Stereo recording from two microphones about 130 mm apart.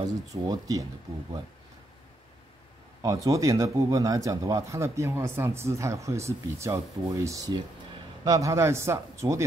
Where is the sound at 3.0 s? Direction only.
25° right (ahead or behind).